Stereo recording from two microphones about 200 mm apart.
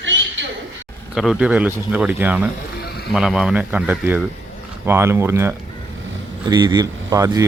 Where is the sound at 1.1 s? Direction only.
Centre (ahead or behind).